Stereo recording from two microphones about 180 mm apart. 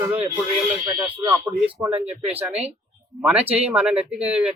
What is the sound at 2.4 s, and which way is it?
Speech, 5° right (ahead or behind).